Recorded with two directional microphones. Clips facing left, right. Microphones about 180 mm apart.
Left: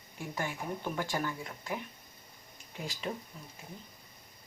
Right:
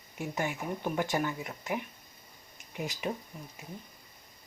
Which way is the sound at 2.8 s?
20° right (ahead or behind).